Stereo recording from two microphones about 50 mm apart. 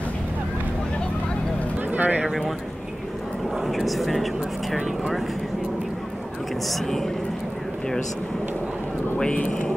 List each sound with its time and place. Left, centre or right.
1.9 s a sound: right
3.6 s speech: centre
6.7 s speech: centre
9.2 s speech: left